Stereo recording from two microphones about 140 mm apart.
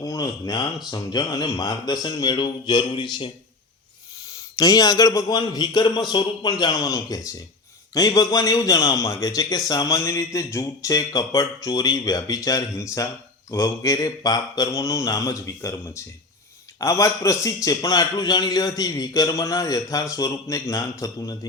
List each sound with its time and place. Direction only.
0.0 s a man's voice: 25° left (ahead or behind)
4.3 s a man's voice: 25° left (ahead or behind)